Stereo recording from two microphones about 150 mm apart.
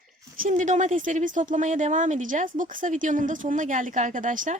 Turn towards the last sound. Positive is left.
turn(degrees=-60)  # may be behind; listen again after turning